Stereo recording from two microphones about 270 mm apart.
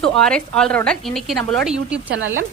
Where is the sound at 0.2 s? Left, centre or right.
Centre.